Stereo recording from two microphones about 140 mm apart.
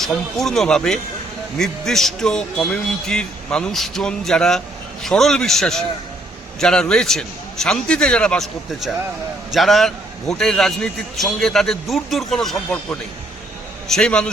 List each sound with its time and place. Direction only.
0.0 s a man's voice: centre (ahead or behind)